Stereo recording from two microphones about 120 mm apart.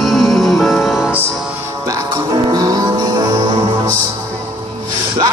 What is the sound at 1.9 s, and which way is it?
Music, 35° right (ahead or behind).